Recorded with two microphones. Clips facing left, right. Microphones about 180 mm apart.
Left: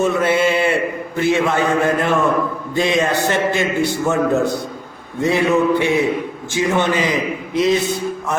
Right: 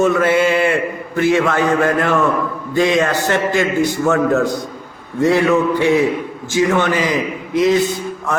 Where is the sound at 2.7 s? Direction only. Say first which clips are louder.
Right 2 dB; 20° left (ahead or behind).